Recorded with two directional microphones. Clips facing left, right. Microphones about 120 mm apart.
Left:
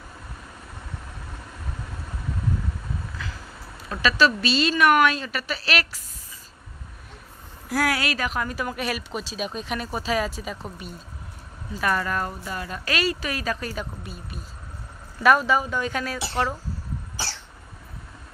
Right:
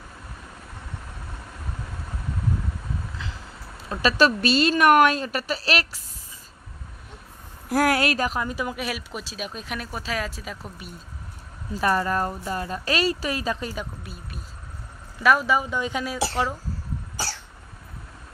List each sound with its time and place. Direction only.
3.2 s vehicle: 25° right (ahead or behind)
4.0 s a woman's voice: 45° right (ahead or behind); by 5.9 s 30° right (ahead or behind)
7.7 s a woman's voice: 45° right (ahead or behind)
8.4 s speech: 20° right (ahead or behind)
8.7 s speech: 5° right (ahead or behind)
11.8 s speech: 30° right (ahead or behind)
15.2 s speech: 10° right (ahead or behind)